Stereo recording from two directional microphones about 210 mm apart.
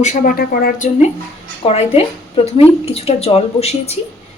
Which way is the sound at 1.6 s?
30° left (ahead or behind).